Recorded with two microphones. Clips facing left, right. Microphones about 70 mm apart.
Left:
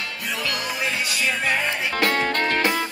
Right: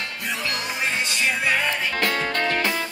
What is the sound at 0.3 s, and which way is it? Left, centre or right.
Music, right.